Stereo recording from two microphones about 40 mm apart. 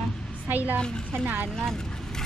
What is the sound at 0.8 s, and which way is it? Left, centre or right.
Speech, left.